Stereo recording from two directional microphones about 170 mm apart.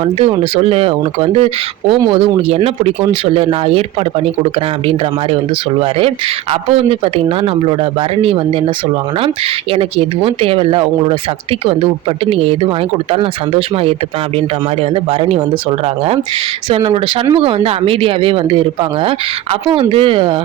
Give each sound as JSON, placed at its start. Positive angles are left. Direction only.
{"t": 0.0, "sound": "speech", "side_deg": -35}
{"t": 5.8, "sound": "speech", "side_deg": -35}
{"t": 9.7, "sound": "speech", "side_deg": -35}
{"t": 16.6, "sound": "speech", "side_deg": -30}